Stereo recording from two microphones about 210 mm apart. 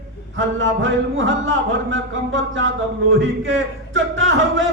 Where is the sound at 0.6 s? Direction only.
65° right (ahead or behind).